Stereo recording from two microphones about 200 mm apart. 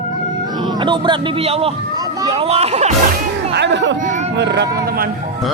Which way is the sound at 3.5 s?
60° right (ahead or behind).